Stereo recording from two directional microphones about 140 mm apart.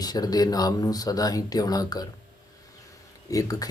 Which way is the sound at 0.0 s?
30° left (ahead or behind).